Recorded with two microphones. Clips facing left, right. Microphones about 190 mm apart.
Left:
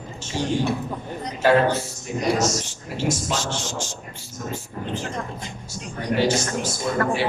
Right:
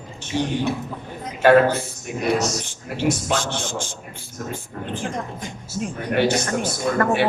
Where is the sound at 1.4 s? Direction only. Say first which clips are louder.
Right 4 dB; 55° right (ahead or behind).